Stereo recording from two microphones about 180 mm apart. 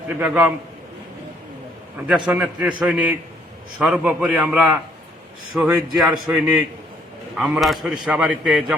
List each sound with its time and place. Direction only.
0.2 s a man's voice: 5° right (ahead or behind)
2.0 s a man's voice: 5° right (ahead or behind)